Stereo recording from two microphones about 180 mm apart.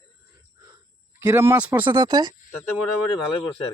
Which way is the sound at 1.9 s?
25° right (ahead or behind).